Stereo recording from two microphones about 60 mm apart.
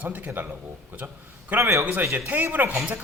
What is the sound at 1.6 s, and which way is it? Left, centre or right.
Speech, right.